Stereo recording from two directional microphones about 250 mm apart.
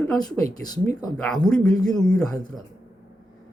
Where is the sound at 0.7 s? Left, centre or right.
Centre.